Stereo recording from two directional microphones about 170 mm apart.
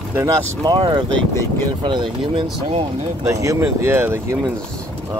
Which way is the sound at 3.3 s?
15° right (ahead or behind).